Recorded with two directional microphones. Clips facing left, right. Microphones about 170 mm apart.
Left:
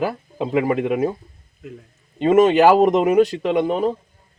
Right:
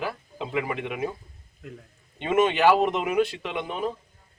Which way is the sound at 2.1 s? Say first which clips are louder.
Left 9 dB; 40° left (ahead or behind).